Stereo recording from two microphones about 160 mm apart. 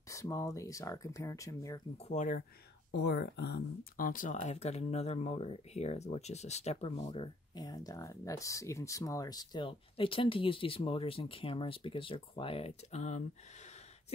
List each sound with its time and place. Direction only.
0.1 s speech: 20° left (ahead or behind)
2.0 s speech: 50° left (ahead or behind)
3.0 s speech: 90° left; by 13.2 s 45° left (ahead or behind)